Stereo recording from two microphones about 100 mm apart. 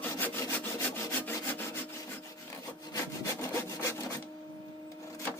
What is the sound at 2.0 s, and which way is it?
Wood, 30° left (ahead or behind).